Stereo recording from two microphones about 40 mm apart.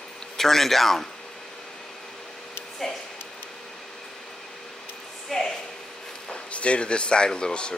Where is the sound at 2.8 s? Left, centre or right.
Centre.